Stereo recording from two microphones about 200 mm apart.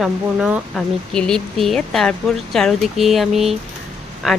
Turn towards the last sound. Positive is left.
turn(degrees=0)  # may be behind; listen again after turning